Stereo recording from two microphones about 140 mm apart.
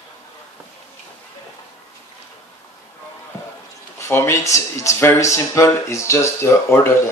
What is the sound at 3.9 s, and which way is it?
Speech, 20° left (ahead or behind).